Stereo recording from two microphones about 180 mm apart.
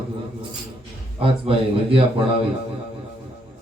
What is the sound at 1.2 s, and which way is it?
Speech, 30° right (ahead or behind).